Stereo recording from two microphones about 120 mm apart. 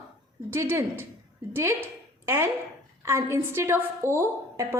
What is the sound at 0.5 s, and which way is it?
A woman's voice, 25° right (ahead or behind).